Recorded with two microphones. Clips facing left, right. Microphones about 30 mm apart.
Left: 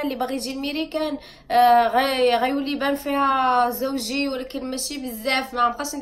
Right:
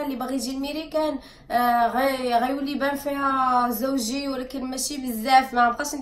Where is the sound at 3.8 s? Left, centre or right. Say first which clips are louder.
Even; left.